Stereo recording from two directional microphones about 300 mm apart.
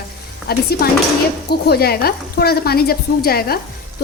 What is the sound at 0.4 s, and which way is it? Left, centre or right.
A woman's voice, left.